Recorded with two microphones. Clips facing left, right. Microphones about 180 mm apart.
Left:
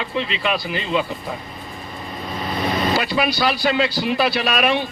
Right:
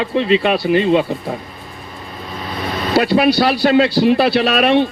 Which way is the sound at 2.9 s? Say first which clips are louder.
Right 8 dB; 60° right (ahead or behind).